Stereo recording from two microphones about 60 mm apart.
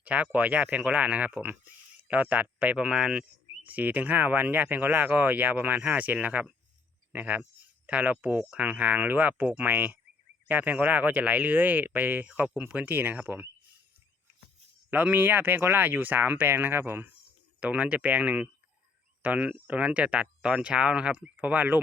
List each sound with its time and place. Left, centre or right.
0.0 s speech: right
3.7 s speech: right
14.8 s speech: right
17.6 s speech: right